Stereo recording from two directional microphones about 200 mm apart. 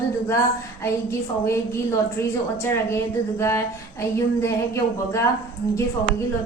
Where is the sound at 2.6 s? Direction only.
15° left (ahead or behind).